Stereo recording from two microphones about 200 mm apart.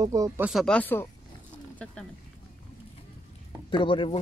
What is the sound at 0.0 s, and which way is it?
Speech, 15° right (ahead or behind).